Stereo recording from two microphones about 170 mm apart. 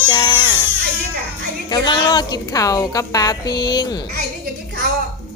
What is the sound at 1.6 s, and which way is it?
A woman's voice, 25° left (ahead or behind).